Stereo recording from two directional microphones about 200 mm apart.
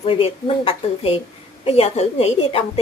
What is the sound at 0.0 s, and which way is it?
A woman's voice, 25° left (ahead or behind).